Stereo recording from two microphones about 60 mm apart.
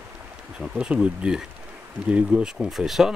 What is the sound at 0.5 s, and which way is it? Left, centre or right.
Speech, centre.